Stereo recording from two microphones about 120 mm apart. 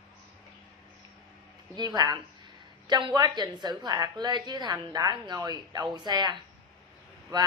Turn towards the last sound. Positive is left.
turn(degrees=-35)  # may be behind; listen again after turning